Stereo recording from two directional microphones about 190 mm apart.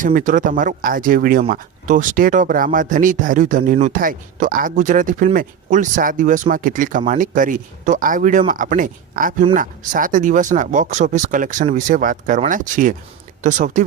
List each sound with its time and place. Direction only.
0.0 s speech: 45° right (ahead or behind)